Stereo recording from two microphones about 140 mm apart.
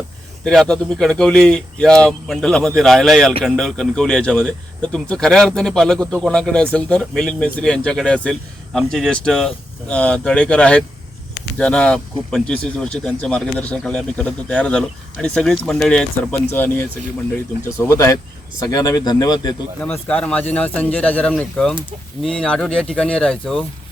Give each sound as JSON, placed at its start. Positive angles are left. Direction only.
{"t": 0.4, "sound": "speech", "side_deg": 5}
{"t": 19.8, "sound": "speech", "side_deg": 10}